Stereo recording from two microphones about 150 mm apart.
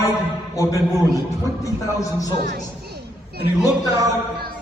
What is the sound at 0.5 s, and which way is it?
A man's voice, 20° left (ahead or behind).